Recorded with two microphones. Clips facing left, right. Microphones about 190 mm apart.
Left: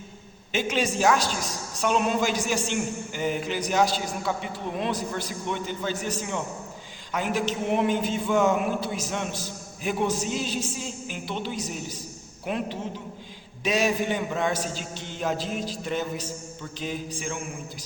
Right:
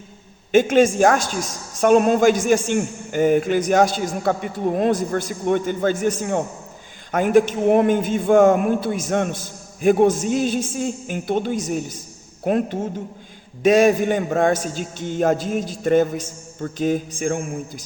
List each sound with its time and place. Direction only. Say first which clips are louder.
0.5 s a woman's voice: right 11 dB; 50° right (ahead or behind)